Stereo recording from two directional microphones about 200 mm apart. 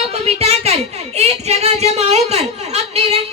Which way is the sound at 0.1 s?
30° right (ahead or behind).